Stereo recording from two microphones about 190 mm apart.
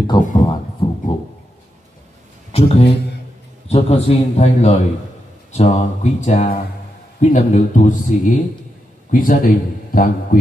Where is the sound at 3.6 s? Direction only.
35° left (ahead or behind).